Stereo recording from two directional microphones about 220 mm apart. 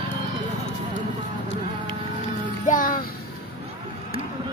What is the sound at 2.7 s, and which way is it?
Music, 40° left (ahead or behind).